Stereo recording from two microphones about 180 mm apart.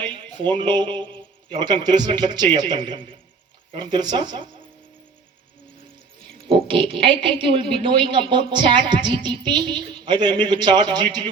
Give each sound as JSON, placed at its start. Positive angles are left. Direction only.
{"t": 0.0, "sound": "speech", "side_deg": -25}
{"t": 6.5, "sound": "speech", "side_deg": -30}